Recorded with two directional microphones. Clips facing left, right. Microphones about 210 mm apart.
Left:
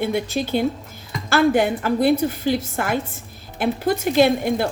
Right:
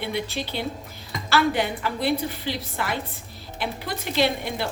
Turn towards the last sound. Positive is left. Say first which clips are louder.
# left 7 dB
turn(degrees=50)  # may be behind; listen again after turning